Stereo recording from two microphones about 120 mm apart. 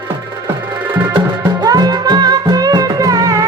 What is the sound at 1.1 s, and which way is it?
Music, 35° right (ahead or behind).